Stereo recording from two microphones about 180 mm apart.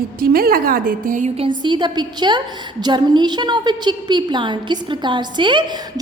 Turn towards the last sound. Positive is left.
turn(degrees=-25)  # may be behind; listen again after turning